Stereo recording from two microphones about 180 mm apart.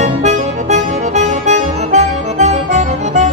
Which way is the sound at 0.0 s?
40° right (ahead or behind).